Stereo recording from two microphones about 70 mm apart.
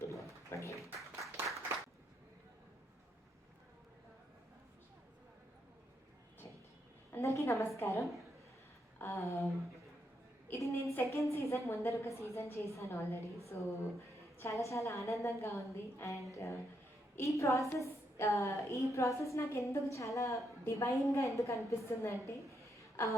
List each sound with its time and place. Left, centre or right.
0.5 s a woman's voice: left
0.9 s applause: right
7.1 s a woman's voice: left
10.5 s a woman's voice: left